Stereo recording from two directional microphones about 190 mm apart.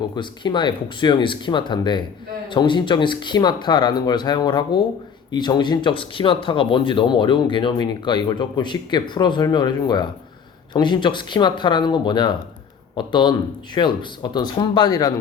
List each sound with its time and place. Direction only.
0.2 s speech: 25° left (ahead or behind)